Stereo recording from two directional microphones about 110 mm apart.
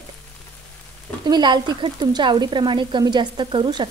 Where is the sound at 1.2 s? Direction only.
40° right (ahead or behind).